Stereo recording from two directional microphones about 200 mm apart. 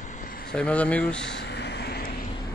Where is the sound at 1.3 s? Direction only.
55° left (ahead or behind).